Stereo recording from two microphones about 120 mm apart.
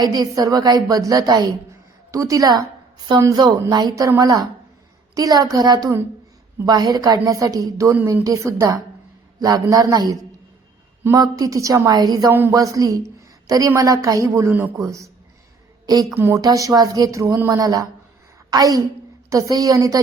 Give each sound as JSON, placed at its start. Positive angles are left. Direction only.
{"t": 0.0, "sound": "a woman's voice", "side_deg": -35}
{"t": 12.3, "sound": "a woman's voice", "side_deg": -20}
{"t": 12.5, "sound": "a woman's voice", "side_deg": -30}
{"t": 16.1, "sound": "a woman's voice", "side_deg": -20}